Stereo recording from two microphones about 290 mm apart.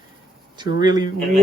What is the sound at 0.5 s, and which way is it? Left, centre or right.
Speech, centre.